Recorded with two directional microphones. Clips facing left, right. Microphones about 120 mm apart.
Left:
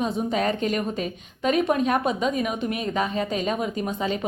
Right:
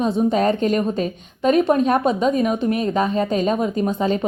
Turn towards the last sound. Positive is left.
turn(degrees=-35)  # may be behind; listen again after turning